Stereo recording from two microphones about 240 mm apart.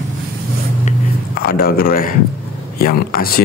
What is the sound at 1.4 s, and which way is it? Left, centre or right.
Speech, left.